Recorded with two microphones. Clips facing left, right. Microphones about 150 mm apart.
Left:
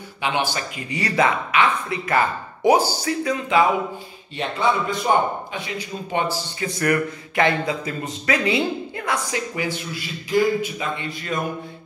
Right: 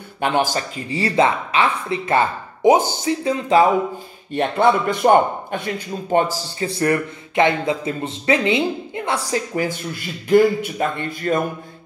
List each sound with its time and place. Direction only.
0.2 s speech: 45° right (ahead or behind)
4.3 s speech: 55° right (ahead or behind)
6.6 s speech: 30° right (ahead or behind)
9.6 s speech: 50° right (ahead or behind)